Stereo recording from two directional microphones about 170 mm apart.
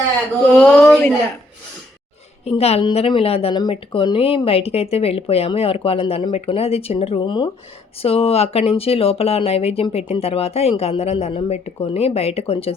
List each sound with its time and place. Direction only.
0.5 s speech: 5° left (ahead or behind)
2.4 s speech: 35° left (ahead or behind)